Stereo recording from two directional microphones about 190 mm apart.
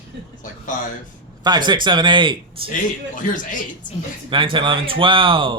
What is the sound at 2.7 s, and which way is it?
Speech, 45° left (ahead or behind).